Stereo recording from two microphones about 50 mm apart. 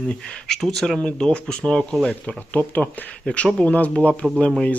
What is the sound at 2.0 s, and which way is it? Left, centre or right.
Speech, left.